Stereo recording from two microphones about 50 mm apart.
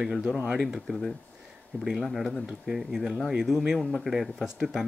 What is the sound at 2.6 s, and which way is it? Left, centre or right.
Speech, centre.